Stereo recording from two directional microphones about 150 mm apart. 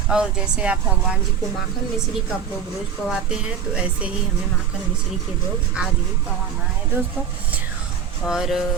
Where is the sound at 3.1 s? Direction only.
5° right (ahead or behind).